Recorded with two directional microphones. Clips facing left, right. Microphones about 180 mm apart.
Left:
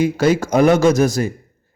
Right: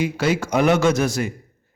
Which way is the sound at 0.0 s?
40° left (ahead or behind).